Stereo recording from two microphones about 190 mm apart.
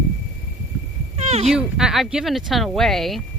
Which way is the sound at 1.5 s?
5° right (ahead or behind).